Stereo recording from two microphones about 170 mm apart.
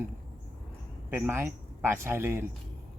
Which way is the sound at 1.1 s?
15° right (ahead or behind).